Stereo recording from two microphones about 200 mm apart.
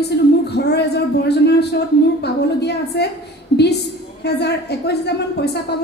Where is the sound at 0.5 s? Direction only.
55° left (ahead or behind).